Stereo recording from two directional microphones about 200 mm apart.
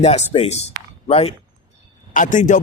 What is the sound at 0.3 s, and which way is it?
A man's voice, 30° left (ahead or behind).